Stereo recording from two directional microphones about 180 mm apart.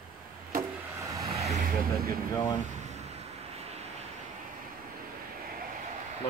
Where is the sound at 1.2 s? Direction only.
35° right (ahead or behind).